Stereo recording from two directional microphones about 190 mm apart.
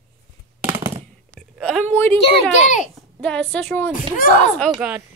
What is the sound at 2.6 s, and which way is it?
Speech, 40° left (ahead or behind).